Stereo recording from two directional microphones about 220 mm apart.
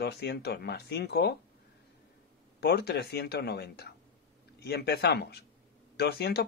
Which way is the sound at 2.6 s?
50° left (ahead or behind).